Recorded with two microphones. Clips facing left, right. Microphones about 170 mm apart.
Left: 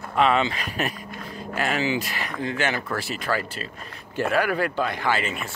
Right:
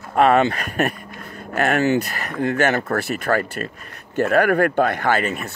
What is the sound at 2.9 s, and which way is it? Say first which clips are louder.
Speech: right 6 dB; 60° right (ahead or behind).